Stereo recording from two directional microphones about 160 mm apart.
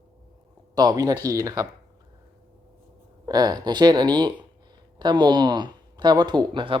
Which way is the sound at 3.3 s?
25° right (ahead or behind).